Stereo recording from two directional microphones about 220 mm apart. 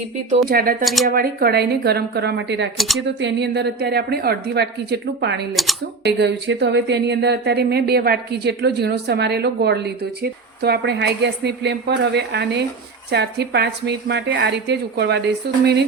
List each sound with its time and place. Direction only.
0.4 s a woman's voice: 40° right (ahead or behind)
2.7 s speech: centre (ahead or behind)
3.0 s a woman's voice: 55° right (ahead or behind)